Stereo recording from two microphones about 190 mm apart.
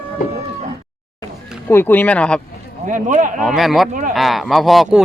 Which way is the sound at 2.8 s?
40° right (ahead or behind).